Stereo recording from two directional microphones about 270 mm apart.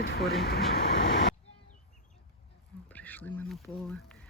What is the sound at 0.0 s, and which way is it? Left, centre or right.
Speech, left.